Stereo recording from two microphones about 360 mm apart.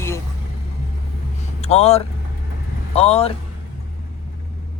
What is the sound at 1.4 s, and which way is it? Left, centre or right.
Vehicle, centre.